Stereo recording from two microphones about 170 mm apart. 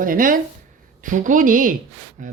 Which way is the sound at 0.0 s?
50° right (ahead or behind).